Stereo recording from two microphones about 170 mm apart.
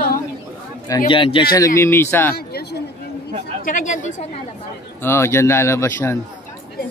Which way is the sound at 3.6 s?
50° left (ahead or behind).